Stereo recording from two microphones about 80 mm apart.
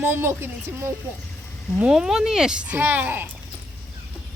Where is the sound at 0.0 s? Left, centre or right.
Right.